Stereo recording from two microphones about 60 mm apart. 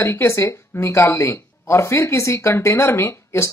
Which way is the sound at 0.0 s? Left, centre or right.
Left.